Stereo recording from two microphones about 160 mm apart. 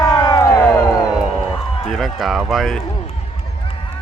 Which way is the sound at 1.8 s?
Centre (ahead or behind).